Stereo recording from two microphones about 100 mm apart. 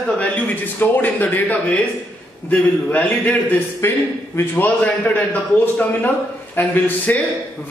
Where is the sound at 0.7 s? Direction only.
20° left (ahead or behind).